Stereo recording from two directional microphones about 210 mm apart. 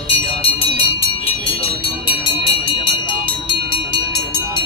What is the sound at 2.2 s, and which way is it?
Vehicle, 25° left (ahead or behind).